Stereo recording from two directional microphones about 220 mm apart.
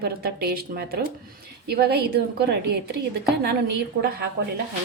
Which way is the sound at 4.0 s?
45° right (ahead or behind).